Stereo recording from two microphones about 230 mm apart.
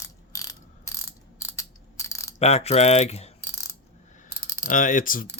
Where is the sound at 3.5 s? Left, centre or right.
Centre.